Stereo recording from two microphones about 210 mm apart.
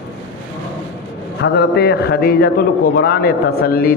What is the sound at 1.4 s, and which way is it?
Speech, 55° left (ahead or behind).